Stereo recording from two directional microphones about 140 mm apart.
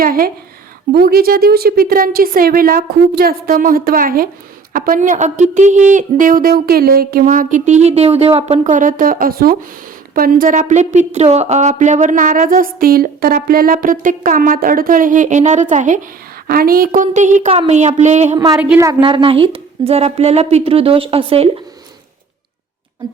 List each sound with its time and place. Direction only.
0.0 s a woman's voice: 90° right
4.7 s speech: 70° right (ahead or behind); by 8.7 s 50° right (ahead or behind)
8.7 s a woman's voice: 70° right (ahead or behind)
16.5 s a woman's voice: 90° right; by 18.3 s 55° right (ahead or behind)
18.3 s a woman's voice: 25° right (ahead or behind); by 21.6 s 45° right (ahead or behind)